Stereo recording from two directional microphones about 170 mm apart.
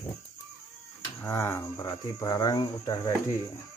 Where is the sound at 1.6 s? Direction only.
20° left (ahead or behind).